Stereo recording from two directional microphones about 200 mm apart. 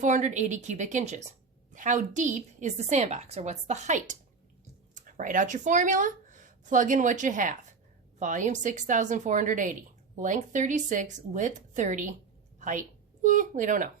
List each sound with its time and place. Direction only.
0.0 s a woman's voice: 35° right (ahead or behind)
12.5 s a sound: 40° right (ahead or behind)
13.2 s a woman's voice: 40° right (ahead or behind)